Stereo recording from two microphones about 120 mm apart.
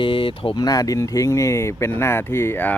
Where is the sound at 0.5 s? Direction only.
30° left (ahead or behind).